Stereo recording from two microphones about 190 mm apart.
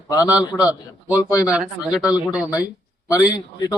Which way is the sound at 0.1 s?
20° left (ahead or behind).